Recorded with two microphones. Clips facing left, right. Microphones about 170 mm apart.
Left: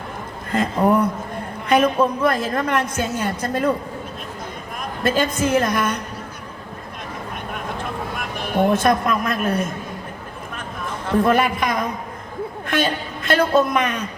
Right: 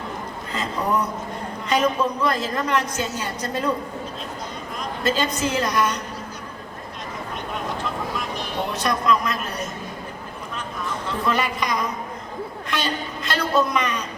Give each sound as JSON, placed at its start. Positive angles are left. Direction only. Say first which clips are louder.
{"t": 0.5, "sound": "a woman's voice", "louder": "left 7 dB", "side_deg": 55}
{"t": 4.8, "sound": "a woman's voice", "louder": "left 3 dB", "side_deg": 55}
{"t": 8.5, "sound": "a woman's voice", "louder": "left 9 dB", "side_deg": 55}
{"t": 11.3, "sound": "a woman's voice", "louder": "left 1 dB", "side_deg": 55}